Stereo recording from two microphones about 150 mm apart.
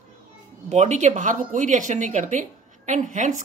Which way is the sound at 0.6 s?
50° right (ahead or behind).